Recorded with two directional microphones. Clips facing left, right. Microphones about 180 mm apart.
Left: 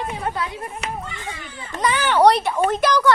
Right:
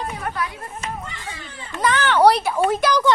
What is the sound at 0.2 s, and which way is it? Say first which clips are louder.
Speech: left 1 dB; 20° left (ahead or behind).